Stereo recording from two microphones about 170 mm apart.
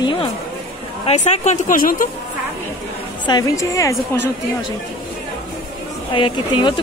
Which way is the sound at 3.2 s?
20° left (ahead or behind).